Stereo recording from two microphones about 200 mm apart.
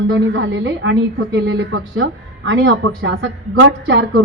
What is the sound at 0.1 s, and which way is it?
A woman's voice, 65° right (ahead or behind).